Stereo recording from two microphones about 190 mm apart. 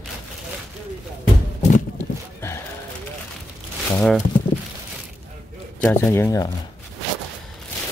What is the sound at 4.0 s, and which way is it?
Speech, 5° left (ahead or behind).